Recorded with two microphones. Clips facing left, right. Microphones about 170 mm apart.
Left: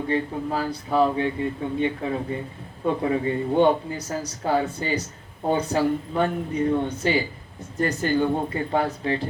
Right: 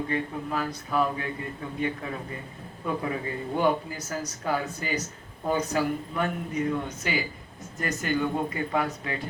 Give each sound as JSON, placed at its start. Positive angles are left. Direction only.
{"t": 0.1, "sound": "speech", "side_deg": 30}